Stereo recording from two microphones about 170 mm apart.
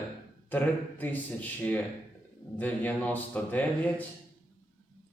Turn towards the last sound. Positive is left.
turn(degrees=10)  # may be behind; listen again after turning